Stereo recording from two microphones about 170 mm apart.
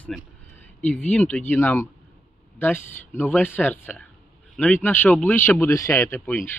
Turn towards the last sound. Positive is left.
turn(degrees=10)  # may be behind; listen again after turning